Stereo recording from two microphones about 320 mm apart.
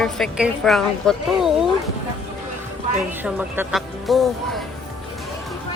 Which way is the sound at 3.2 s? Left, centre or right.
Centre.